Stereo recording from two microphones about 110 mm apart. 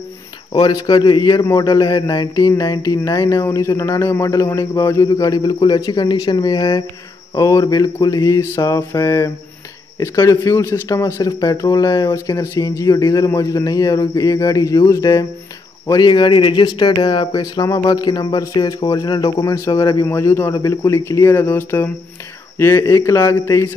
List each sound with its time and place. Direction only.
0.5 s speech: 40° left (ahead or behind)
1.4 s speech: 30° left (ahead or behind)
15.9 s speech: 45° left (ahead or behind)
17.3 s speech: 35° left (ahead or behind)